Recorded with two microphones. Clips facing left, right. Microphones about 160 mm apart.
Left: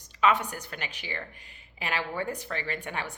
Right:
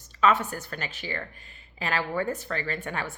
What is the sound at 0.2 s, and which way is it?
A woman's voice, 15° left (ahead or behind).